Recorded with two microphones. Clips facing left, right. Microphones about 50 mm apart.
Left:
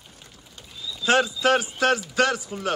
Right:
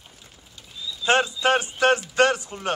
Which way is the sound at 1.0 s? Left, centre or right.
Right.